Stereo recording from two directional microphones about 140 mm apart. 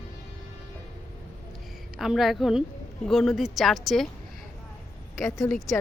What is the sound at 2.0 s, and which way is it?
Speech, centre (ahead or behind).